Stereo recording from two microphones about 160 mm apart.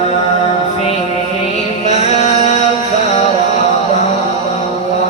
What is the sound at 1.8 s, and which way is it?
Music, 45° left (ahead or behind).